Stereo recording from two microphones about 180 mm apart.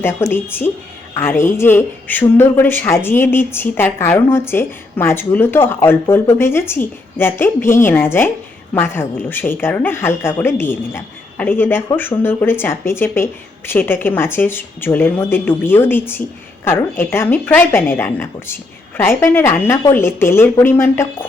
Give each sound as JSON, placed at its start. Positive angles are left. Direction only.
{"t": 0.0, "sound": "a woman's voice", "side_deg": 10}